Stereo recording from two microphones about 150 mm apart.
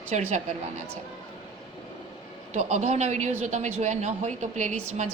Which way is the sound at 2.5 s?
50° right (ahead or behind).